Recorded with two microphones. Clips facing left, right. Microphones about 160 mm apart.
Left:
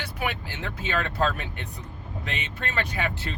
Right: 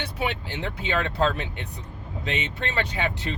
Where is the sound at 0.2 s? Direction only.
20° right (ahead or behind).